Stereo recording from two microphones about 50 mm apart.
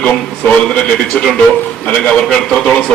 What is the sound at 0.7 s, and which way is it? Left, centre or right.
Speech, centre.